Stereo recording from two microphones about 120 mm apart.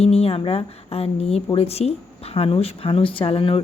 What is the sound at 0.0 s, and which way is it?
Speech, 60° left (ahead or behind).